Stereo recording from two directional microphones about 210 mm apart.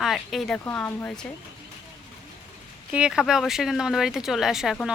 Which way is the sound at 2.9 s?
5° right (ahead or behind).